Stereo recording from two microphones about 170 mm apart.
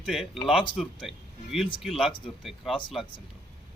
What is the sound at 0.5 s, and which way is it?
Speech, 30° left (ahead or behind).